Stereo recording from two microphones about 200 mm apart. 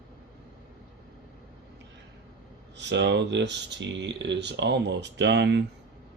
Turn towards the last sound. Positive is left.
turn(degrees=-60)  # may be behind; listen again after turning